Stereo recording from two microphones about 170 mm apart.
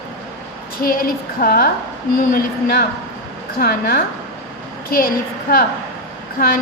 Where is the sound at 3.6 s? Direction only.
60° left (ahead or behind).